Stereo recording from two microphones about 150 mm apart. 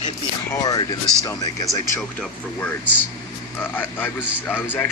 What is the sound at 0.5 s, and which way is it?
Speech, 25° left (ahead or behind).